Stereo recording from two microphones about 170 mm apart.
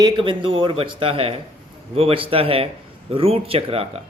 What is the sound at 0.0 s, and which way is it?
Speech, 30° right (ahead or behind).